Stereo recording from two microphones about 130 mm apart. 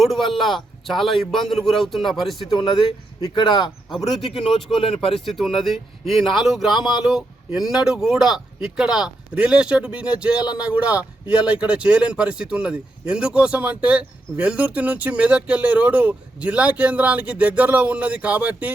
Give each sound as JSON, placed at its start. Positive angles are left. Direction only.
{"t": 0.0, "sound": "speech", "side_deg": 0}
{"t": 2.5, "sound": "speech", "side_deg": 35}
{"t": 4.8, "sound": "speech", "side_deg": 45}
{"t": 5.1, "sound": "speech", "side_deg": 0}